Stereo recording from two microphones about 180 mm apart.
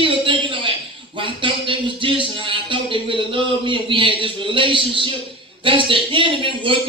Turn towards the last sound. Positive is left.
turn(degrees=-30)  # may be behind; listen again after turning